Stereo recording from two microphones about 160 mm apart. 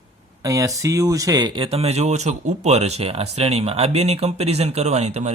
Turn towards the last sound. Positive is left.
turn(degrees=-45)  # may be behind; listen again after turning